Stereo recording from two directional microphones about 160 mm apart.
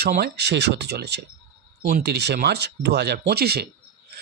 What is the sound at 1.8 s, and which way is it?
Speech, 75° right (ahead or behind).